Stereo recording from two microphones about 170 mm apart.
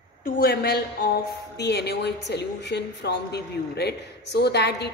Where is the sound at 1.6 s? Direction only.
75° left (ahead or behind).